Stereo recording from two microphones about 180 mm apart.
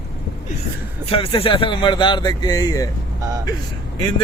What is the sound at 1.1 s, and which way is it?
Speech, 30° left (ahead or behind).